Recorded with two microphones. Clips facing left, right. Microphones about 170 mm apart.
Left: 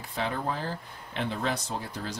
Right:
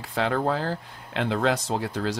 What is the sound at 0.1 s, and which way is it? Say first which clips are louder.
Speech: right 7 dB; 90° right.